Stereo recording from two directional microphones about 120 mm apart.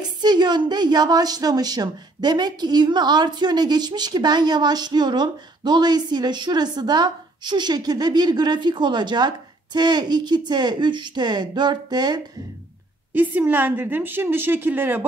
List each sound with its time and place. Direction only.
0.2 s a woman's voice: 35° right (ahead or behind)
13.1 s a woman's voice: 15° right (ahead or behind)